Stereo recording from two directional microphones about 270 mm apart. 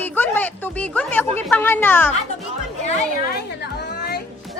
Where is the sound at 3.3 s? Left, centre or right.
Left.